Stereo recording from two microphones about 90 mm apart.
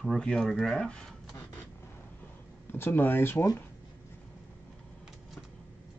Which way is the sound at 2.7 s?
25° left (ahead or behind).